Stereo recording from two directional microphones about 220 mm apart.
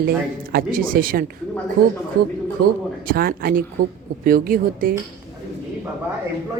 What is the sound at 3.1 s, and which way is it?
A woman's voice, 40° right (ahead or behind).